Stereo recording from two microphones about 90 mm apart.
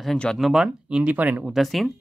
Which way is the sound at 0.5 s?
10° right (ahead or behind).